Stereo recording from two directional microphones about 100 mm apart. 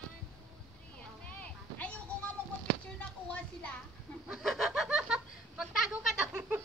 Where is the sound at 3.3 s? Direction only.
10° left (ahead or behind).